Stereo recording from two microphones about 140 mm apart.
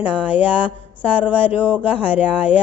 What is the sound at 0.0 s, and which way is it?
Speech, 40° left (ahead or behind).